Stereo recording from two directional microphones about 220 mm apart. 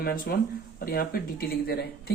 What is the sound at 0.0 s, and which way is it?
Speech, 40° left (ahead or behind).